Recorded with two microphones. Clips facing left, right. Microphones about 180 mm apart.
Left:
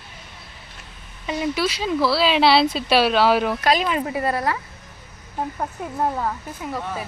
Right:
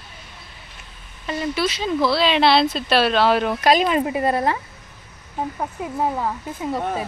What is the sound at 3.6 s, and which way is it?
A woman's voice, 20° right (ahead or behind).